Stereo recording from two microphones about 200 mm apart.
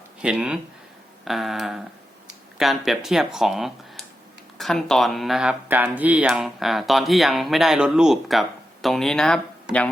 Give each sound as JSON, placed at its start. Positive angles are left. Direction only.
{"t": 0.2, "sound": "speech", "side_deg": -5}